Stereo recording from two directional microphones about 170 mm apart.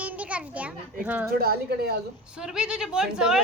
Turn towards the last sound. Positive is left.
turn(degrees=-5)  # may be behind; listen again after turning